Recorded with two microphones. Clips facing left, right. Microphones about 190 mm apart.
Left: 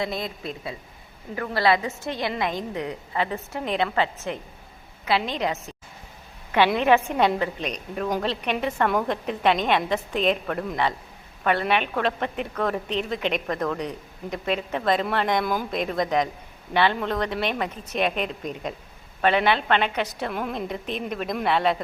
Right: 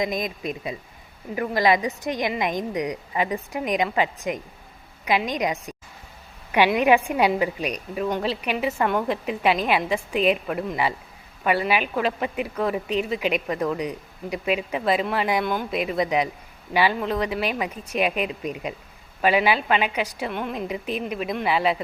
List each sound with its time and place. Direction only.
0.0 s a woman's voice: 15° right (ahead or behind)
6.7 s a woman's voice: 10° right (ahead or behind)